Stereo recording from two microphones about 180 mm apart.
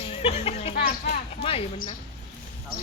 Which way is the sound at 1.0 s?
45° left (ahead or behind).